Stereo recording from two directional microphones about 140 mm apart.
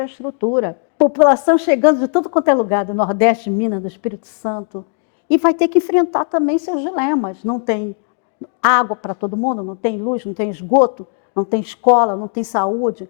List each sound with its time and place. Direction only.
0.4 s a woman's voice: 25° left (ahead or behind)